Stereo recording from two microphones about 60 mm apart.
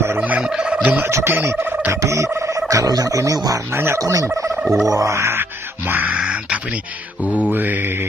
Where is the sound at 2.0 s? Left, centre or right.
Right.